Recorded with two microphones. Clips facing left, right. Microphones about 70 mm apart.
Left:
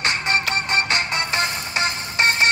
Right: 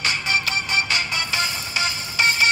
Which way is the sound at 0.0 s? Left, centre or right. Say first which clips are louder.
Left 2 dB; left.